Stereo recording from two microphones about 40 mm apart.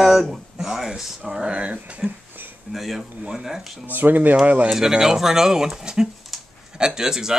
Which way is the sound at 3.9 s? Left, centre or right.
Right.